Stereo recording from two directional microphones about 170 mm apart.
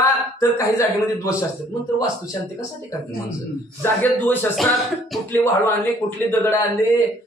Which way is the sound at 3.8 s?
10° left (ahead or behind).